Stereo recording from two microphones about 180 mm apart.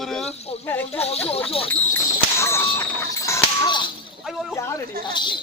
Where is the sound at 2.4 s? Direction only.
15° left (ahead or behind).